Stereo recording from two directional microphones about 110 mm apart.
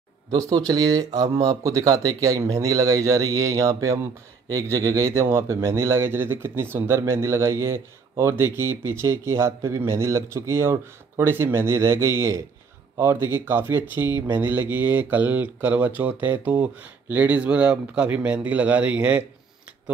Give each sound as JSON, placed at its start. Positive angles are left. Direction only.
{"t": 0.3, "sound": "a man's voice", "side_deg": -35}